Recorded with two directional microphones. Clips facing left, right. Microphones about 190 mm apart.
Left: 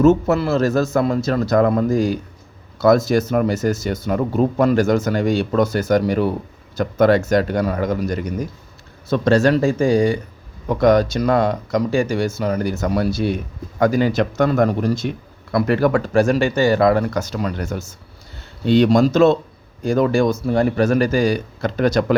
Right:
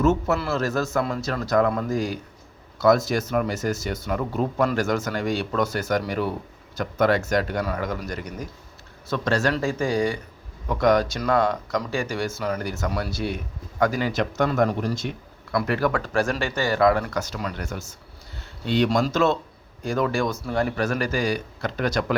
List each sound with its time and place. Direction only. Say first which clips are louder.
0.3 s speech: left 7 dB; 25° left (ahead or behind); by 14.9 s 50° left (ahead or behind)
15.5 s speech: left 6 dB; 30° left (ahead or behind)